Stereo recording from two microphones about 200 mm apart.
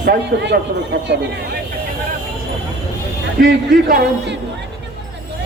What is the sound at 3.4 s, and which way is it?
Speech, 60° right (ahead or behind).